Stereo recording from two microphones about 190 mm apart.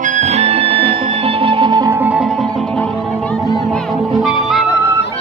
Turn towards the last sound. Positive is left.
turn(degrees=0)  # may be behind; listen again after turning